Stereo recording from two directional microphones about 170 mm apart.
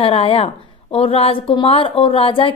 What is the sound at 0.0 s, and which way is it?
Music, 35° left (ahead or behind).